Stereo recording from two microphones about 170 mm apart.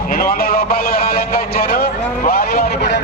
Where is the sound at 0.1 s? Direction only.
60° left (ahead or behind).